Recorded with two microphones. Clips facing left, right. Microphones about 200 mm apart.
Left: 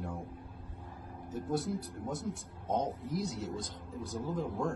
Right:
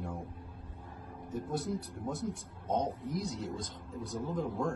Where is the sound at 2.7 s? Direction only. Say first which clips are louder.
Even; centre (ahead or behind).